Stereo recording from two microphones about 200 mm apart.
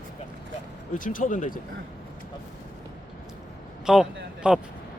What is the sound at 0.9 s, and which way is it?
Speech, 45° left (ahead or behind).